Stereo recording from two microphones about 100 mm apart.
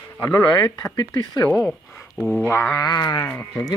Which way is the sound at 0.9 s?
45° left (ahead or behind).